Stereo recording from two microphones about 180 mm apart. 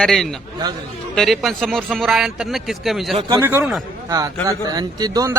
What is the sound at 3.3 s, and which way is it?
Speech, 15° right (ahead or behind).